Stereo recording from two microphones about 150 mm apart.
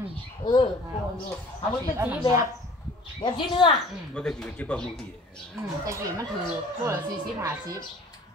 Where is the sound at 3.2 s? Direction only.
30° left (ahead or behind).